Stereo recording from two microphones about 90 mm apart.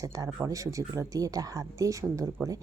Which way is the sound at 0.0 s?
40° right (ahead or behind).